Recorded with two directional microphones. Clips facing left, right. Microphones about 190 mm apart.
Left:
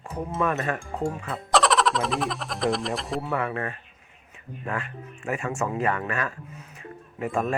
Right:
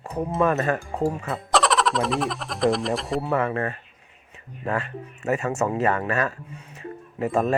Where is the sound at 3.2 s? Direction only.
35° right (ahead or behind).